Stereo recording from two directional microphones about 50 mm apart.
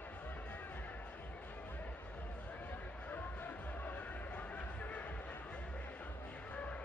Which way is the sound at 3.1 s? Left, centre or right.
Left.